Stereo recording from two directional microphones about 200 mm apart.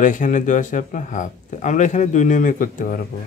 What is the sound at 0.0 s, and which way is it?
Speech, 40° left (ahead or behind).